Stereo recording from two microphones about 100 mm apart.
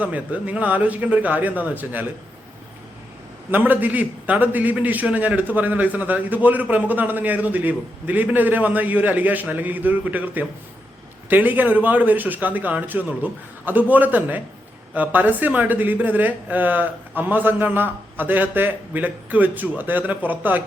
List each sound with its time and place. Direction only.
0.0 s a man's voice: 15° right (ahead or behind)
3.5 s a man's voice: 20° right (ahead or behind)